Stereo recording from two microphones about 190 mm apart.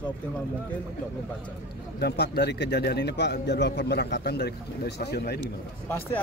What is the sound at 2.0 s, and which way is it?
A man's voice, 60° left (ahead or behind).